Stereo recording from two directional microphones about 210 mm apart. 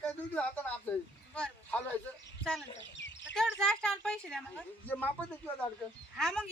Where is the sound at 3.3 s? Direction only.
Centre (ahead or behind).